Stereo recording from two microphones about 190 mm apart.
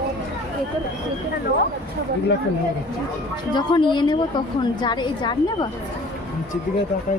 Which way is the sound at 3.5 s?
25° left (ahead or behind).